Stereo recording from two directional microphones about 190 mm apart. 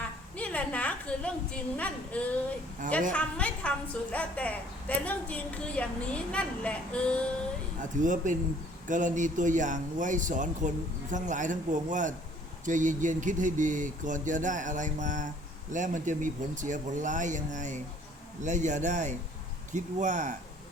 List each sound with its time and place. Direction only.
0.0 s a sound: 5° left (ahead or behind)
1.7 s a woman's voice: 5° left (ahead or behind)
7.8 s speech: 45° right (ahead or behind)